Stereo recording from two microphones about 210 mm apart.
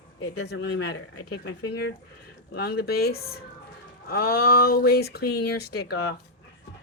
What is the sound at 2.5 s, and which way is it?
Speech, 50° left (ahead or behind).